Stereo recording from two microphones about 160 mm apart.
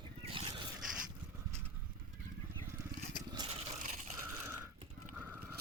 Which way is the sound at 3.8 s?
50° right (ahead or behind).